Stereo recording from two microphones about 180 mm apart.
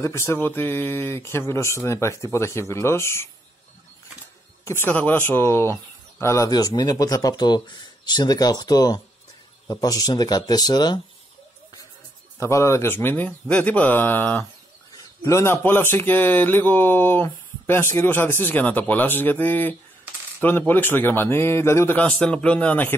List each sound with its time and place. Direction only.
0.0 s speech: 15° left (ahead or behind)
4.6 s speech: 10° left (ahead or behind)
12.4 s speech: 15° left (ahead or behind)